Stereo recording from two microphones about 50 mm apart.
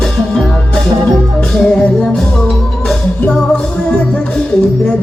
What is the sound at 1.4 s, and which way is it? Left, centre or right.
Music, left.